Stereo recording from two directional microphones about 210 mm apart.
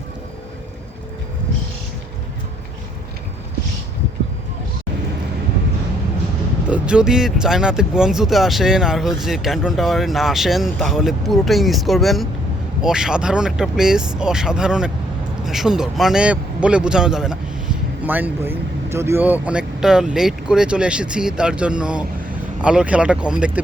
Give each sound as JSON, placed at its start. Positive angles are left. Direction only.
{"t": 6.7, "sound": "speech", "side_deg": -5}